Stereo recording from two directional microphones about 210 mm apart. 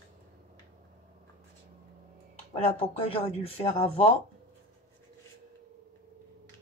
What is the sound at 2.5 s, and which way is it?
Speech, 30° left (ahead or behind).